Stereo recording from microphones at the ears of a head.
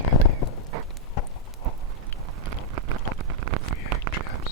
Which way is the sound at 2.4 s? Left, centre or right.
Right.